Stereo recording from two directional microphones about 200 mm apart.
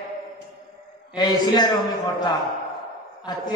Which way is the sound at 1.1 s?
20° left (ahead or behind).